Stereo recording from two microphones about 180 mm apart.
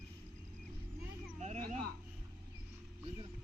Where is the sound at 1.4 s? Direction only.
40° right (ahead or behind).